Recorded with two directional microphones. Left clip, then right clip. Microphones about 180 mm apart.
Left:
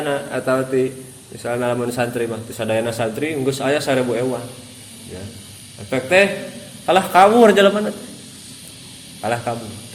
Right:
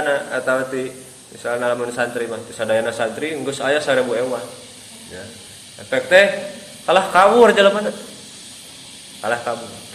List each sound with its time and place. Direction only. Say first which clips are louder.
0.0 s a man's voice: right 2 dB; 35° left (ahead or behind)
5.9 s a man's voice: right 2 dB; 35° left (ahead or behind)
9.2 s a man's voice: right 1 dB; 30° left (ahead or behind)